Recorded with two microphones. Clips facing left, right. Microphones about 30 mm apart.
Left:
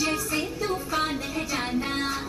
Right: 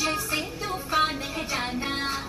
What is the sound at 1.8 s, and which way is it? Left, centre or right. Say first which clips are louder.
Music: left 1 dB; centre.